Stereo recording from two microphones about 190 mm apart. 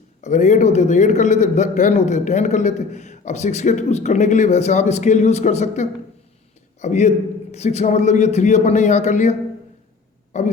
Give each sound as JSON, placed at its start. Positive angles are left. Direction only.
{"t": 0.2, "sound": "a man's voice", "side_deg": 40}
{"t": 10.3, "sound": "burping", "side_deg": 40}